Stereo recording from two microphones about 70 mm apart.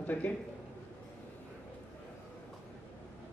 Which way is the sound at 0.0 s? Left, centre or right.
Left.